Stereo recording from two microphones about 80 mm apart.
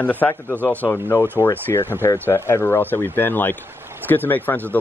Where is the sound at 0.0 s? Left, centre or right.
Left.